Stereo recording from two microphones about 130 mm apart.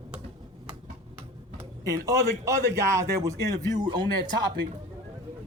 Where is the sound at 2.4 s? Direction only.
25° right (ahead or behind).